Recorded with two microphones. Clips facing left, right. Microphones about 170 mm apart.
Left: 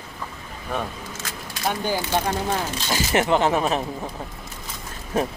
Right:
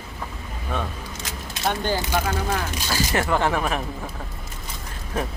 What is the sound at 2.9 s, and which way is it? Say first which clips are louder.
Speech: left 3 dB; 20° left (ahead or behind).